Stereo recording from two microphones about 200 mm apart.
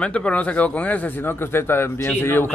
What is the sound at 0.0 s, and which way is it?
Speech, 5° left (ahead or behind).